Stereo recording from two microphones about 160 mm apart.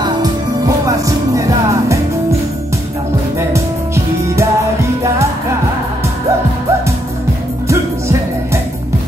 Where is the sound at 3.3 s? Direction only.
15° right (ahead or behind).